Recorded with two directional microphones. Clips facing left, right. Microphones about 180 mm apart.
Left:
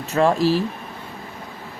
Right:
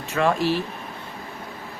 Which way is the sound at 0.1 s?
35° left (ahead or behind).